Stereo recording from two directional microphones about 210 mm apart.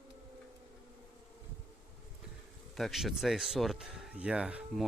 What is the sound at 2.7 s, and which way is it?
Speech, centre (ahead or behind).